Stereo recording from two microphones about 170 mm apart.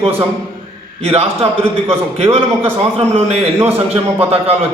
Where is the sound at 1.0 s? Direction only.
35° right (ahead or behind).